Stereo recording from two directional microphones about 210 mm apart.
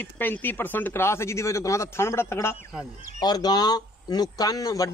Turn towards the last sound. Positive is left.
turn(degrees=15)  # may be behind; listen again after turning